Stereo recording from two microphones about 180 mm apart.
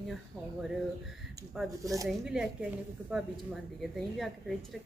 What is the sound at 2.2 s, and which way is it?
Speech, 5° right (ahead or behind).